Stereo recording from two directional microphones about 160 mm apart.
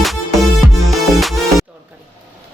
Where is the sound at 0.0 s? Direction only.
Centre (ahead or behind).